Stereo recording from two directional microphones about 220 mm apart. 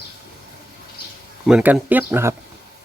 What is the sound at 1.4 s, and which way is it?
Speech, 5° right (ahead or behind).